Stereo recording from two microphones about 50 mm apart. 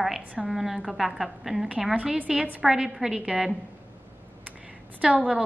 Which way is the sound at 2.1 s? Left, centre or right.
Right.